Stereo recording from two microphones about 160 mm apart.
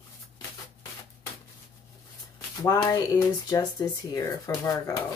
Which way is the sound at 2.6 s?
25° left (ahead or behind).